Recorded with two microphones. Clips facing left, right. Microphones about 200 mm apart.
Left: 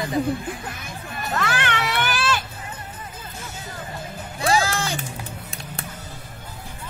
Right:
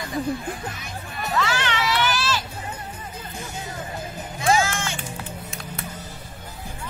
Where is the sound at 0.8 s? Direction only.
50° left (ahead or behind).